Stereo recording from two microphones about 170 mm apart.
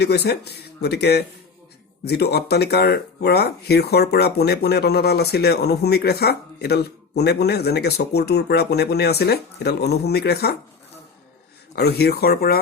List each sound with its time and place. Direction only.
0.0 s speech: 75° left (ahead or behind)
11.7 s speech: 70° left (ahead or behind)